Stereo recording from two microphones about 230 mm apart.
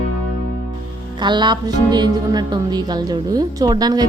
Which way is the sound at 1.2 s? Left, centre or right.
Centre.